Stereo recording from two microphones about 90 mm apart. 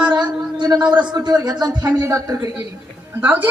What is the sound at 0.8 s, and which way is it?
Speech, 15° right (ahead or behind).